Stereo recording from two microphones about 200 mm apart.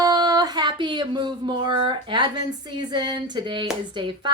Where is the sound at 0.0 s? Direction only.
20° right (ahead or behind).